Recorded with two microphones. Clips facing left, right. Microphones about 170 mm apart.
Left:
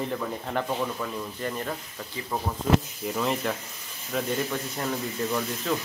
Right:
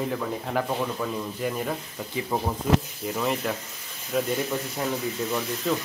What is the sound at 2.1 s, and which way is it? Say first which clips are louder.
Speech: right 4 dB; 20° right (ahead or behind).